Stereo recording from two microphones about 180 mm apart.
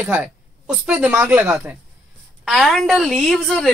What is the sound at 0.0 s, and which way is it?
Speech, 5° right (ahead or behind).